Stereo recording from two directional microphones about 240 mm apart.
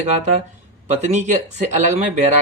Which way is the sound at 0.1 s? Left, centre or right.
Right.